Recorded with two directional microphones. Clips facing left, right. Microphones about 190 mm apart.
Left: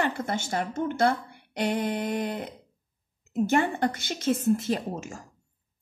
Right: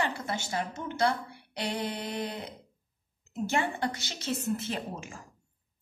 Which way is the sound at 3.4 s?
50° left (ahead or behind).